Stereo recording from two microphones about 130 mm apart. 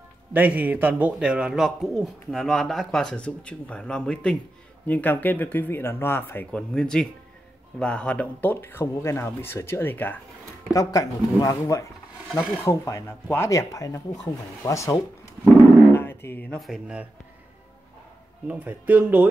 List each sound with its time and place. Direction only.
0.3 s a man's voice: 10° right (ahead or behind); by 6.6 s 15° left (ahead or behind)
6.7 s a man's voice: 5° left (ahead or behind)
10.7 s speech: 25° left (ahead or behind)
15.9 s music: 20° left (ahead or behind)
16.5 s speech: centre (ahead or behind)
18.5 s speech: 15° right (ahead or behind)